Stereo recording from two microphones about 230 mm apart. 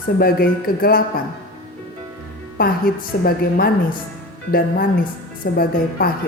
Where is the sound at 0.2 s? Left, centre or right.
Left.